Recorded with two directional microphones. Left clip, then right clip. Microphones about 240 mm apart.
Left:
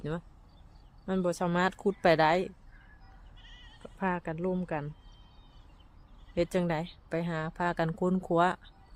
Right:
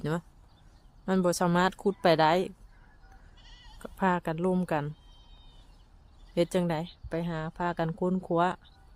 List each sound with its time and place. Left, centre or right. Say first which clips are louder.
1.0 s speech: right 4 dB; centre
3.4 s bleat: left 1 dB; right
3.8 s speech: right 5 dB; centre
6.3 s speech: right 2 dB; centre